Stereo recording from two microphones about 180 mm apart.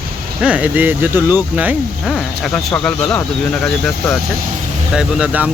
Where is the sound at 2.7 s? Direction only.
5° left (ahead or behind).